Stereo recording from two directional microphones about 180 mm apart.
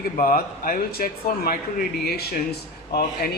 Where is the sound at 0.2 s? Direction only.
50° left (ahead or behind).